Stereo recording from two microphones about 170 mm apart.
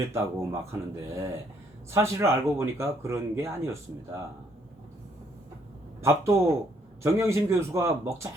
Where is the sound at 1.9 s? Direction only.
15° right (ahead or behind).